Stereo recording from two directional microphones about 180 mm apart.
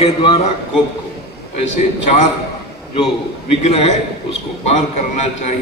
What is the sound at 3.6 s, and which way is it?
A man's voice, 35° left (ahead or behind).